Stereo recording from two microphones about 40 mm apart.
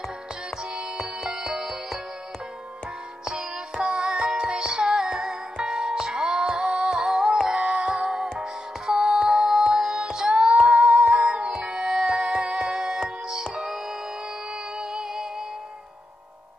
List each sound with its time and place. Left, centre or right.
0.5 s music: centre
3.3 s music: centre
10.5 s humming: right
10.8 s music: right
11.8 s music: centre